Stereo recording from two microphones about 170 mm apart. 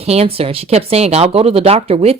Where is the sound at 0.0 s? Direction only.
35° right (ahead or behind).